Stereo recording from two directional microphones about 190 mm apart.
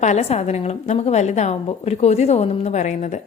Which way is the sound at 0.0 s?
35° left (ahead or behind).